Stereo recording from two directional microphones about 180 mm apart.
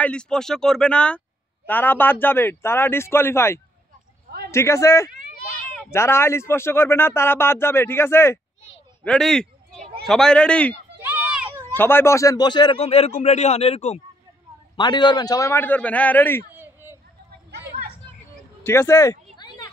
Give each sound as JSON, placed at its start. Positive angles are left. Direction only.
{"t": 0.0, "sound": "speech", "side_deg": 5}
{"t": 11.0, "sound": "children playing", "side_deg": -10}
{"t": 11.7, "sound": "speech", "side_deg": 10}
{"t": 12.8, "sound": "a man's voice", "side_deg": 35}
{"t": 14.8, "sound": "speech", "side_deg": 25}
{"t": 16.5, "sound": "a sound", "side_deg": -15}
{"t": 17.5, "sound": "a sound", "side_deg": -65}
{"t": 18.6, "sound": "speech", "side_deg": 15}
{"t": 19.3, "sound": "a sound", "side_deg": 25}